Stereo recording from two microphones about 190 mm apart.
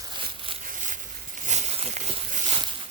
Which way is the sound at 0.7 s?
40° right (ahead or behind).